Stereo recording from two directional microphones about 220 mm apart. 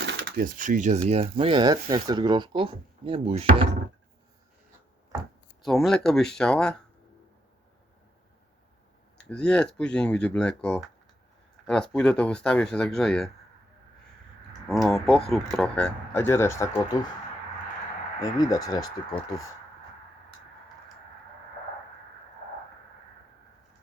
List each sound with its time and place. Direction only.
0.0 s speech: 55° right (ahead or behind); by 3.7 s 30° right (ahead or behind)
5.6 s speech: centre (ahead or behind)
9.1 s speech: 5° left (ahead or behind)
14.7 s speech: centre (ahead or behind)
18.2 s speech: 15° left (ahead or behind)